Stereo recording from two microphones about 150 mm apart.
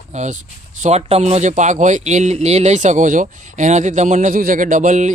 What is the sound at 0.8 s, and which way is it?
Speech, 50° right (ahead or behind).